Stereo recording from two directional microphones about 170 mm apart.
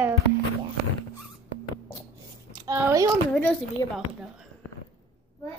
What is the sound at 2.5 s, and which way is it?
Speech, 20° right (ahead or behind).